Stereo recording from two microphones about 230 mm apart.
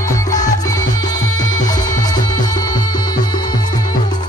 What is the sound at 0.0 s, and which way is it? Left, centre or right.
Music, centre.